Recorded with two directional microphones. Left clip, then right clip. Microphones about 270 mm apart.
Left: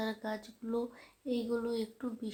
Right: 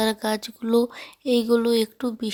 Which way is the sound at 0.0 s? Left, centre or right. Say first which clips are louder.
Right 14 dB; right.